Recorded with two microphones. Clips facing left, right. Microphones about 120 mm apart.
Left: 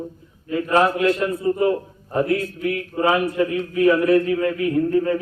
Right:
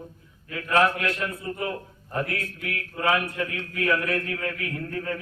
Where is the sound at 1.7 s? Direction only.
25° left (ahead or behind).